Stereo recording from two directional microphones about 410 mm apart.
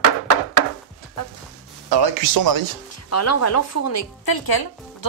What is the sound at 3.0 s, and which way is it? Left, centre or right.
Speech, left.